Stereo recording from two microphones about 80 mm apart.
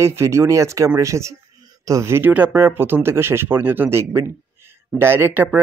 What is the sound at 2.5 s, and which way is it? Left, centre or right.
Speech, right.